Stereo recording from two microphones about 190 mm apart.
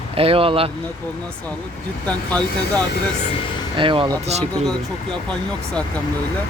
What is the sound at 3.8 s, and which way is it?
Speech, 25° right (ahead or behind).